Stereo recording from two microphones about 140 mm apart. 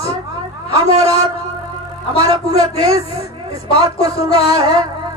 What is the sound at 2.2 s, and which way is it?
A man's voice, 45° right (ahead or behind).